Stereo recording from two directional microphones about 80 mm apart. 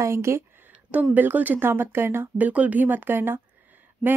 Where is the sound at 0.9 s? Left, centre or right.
Right.